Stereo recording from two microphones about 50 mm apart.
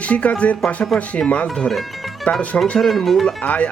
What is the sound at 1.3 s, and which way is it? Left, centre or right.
Speech, left.